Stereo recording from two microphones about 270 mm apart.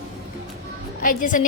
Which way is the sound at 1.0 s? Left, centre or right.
Left.